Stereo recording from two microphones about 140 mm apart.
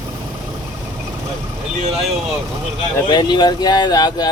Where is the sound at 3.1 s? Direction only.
30° left (ahead or behind).